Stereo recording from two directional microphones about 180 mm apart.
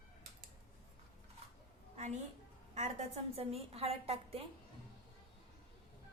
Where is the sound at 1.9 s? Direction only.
40° right (ahead or behind).